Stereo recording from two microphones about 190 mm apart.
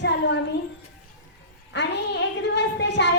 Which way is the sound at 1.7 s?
65° left (ahead or behind).